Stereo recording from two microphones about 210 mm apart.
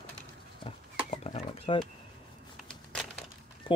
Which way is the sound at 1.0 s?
30° left (ahead or behind).